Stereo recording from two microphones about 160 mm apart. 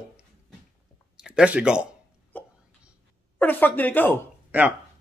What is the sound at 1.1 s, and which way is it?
Speech, 5° right (ahead or behind).